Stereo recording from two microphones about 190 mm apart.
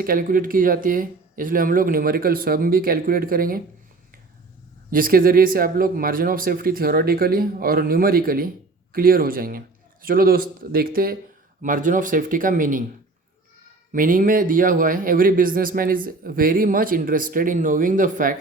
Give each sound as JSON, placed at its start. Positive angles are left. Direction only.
{"t": 0.0, "sound": "speech", "side_deg": -50}
{"t": 4.9, "sound": "speech", "side_deg": -50}
{"t": 13.9, "sound": "speech", "side_deg": -45}